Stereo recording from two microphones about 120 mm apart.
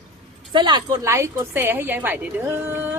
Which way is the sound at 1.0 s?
25° right (ahead or behind).